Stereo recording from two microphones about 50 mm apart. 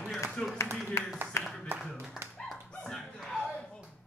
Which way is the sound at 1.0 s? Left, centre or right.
Left.